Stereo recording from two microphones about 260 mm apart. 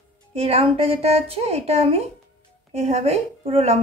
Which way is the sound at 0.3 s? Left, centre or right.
Right.